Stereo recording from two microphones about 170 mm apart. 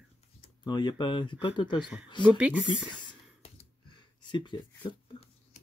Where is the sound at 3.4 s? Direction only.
30° left (ahead or behind).